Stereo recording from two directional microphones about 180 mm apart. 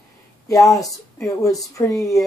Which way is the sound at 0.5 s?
20° left (ahead or behind).